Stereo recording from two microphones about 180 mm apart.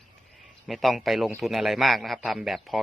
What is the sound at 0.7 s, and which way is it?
A man's voice, centre (ahead or behind).